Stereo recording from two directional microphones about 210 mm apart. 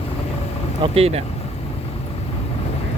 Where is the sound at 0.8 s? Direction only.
25° right (ahead or behind).